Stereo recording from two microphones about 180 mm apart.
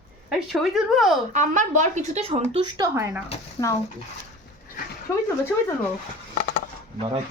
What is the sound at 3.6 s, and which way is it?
Speech, 25° left (ahead or behind).